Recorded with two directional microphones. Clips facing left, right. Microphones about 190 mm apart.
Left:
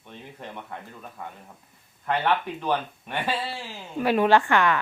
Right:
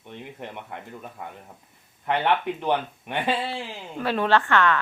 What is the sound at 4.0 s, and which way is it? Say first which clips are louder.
Speech: left 3 dB; 10° left (ahead or behind).